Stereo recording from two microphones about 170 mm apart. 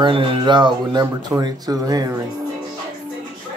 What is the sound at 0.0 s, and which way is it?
Speech, 30° right (ahead or behind).